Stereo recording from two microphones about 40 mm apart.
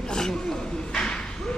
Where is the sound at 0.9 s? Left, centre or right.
Left.